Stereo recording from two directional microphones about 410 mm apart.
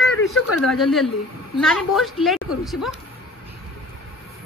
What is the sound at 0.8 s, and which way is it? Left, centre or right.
A woman's voice, centre.